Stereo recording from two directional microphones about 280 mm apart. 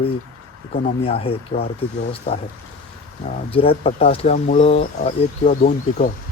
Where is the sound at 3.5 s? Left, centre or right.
Centre.